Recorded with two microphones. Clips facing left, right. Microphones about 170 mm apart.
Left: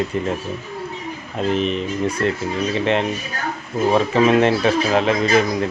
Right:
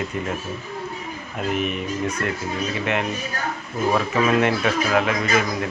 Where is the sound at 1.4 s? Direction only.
30° left (ahead or behind).